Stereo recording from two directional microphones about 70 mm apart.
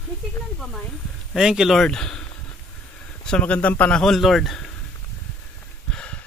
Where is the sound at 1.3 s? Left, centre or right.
Centre.